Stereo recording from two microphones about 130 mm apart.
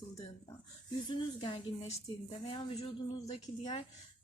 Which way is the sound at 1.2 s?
40° left (ahead or behind).